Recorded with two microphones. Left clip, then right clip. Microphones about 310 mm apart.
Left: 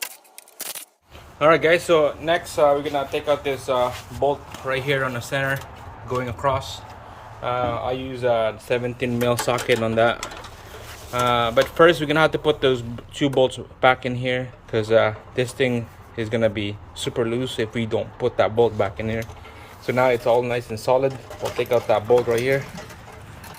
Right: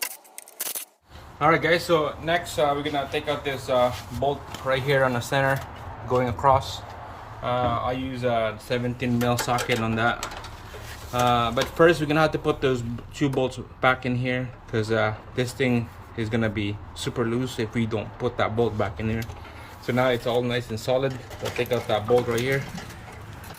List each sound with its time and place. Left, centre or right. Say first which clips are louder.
1.4 s speech: left 4 dB; centre